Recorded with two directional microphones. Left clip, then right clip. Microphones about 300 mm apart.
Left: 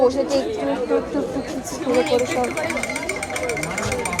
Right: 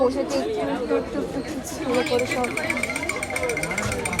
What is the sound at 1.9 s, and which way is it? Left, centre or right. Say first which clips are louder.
Speech: left 4 dB; centre.